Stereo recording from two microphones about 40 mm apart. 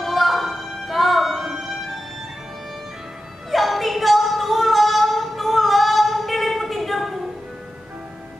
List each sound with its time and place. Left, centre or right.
0.0 s music: centre
3.5 s singing: centre